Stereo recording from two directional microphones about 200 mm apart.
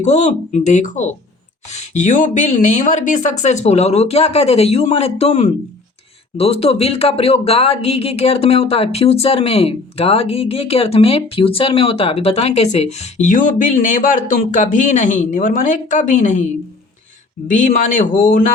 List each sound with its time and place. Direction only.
0.0 s speech: 35° left (ahead or behind)
17.5 s speech: 40° left (ahead or behind)